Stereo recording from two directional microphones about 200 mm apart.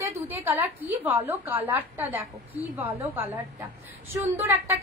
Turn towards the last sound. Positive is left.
turn(degrees=-10)  # may be behind; listen again after turning